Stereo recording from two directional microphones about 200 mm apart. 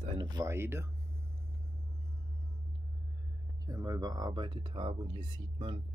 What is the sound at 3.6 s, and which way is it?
Speech, 20° right (ahead or behind).